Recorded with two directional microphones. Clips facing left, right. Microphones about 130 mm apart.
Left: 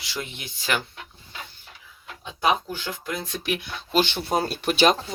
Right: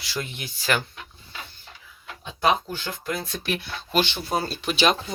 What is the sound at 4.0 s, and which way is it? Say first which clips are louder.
Speech: left 2 dB; 50° left (ahead or behind).